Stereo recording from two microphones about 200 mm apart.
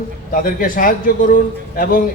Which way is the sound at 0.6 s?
45° left (ahead or behind).